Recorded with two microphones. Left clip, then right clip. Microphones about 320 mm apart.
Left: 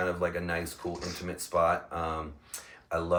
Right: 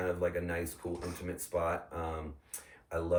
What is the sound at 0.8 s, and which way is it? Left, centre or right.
Speech, left.